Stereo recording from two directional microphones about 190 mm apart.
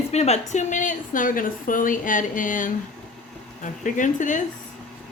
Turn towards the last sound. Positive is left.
turn(degrees=40)  # may be behind; listen again after turning